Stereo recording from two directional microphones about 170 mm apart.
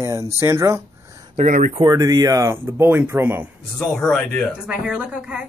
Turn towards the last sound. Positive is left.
turn(degrees=-10)  # may be behind; listen again after turning